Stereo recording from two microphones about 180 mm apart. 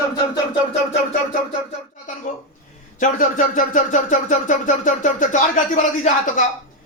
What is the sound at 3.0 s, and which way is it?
Speech, 45° left (ahead or behind).